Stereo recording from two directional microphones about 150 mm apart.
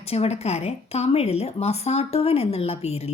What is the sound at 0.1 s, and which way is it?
A woman's voice, 45° left (ahead or behind).